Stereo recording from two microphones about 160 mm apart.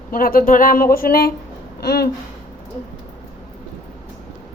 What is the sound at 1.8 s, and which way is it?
Speech, 85° left.